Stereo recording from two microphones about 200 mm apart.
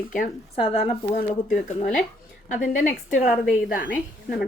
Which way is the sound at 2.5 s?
40° left (ahead or behind).